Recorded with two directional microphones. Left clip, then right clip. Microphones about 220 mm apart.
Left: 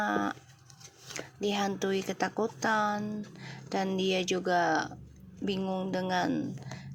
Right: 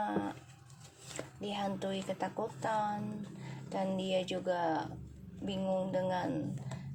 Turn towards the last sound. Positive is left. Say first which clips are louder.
# left 4 dB
turn(degrees=30)  # may be behind; listen again after turning